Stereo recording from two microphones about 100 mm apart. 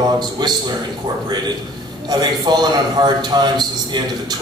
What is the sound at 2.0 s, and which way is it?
A man's voice, 45° right (ahead or behind).